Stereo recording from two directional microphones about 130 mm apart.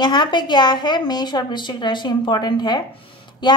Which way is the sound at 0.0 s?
35° left (ahead or behind).